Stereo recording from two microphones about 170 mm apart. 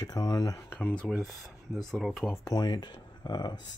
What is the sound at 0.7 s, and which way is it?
Speech, 10° left (ahead or behind).